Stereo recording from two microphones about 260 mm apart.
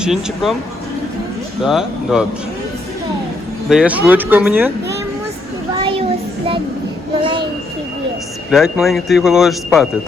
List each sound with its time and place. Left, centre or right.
0.0 s speech: centre
1.6 s speech: centre
3.7 s speech: centre
5.7 s a sound: right
7.2 s a sound: centre
8.4 s speech: centre